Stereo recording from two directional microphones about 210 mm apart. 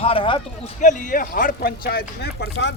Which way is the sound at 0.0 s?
25° left (ahead or behind).